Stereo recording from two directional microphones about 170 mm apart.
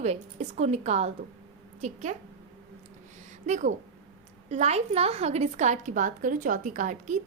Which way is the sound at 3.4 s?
45° right (ahead or behind).